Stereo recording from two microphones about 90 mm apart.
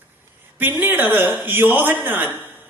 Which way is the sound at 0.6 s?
20° right (ahead or behind).